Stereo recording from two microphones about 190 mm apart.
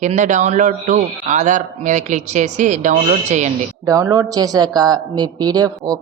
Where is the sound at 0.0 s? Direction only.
40° right (ahead or behind).